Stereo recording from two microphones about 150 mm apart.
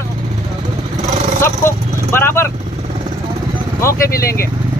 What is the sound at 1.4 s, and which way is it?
Speech, 15° left (ahead or behind).